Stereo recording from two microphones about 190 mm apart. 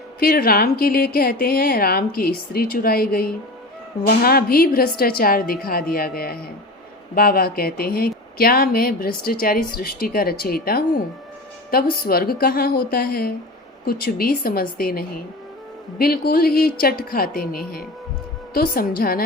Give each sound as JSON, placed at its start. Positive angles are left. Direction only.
{"t": 0.2, "sound": "speech", "side_deg": 50}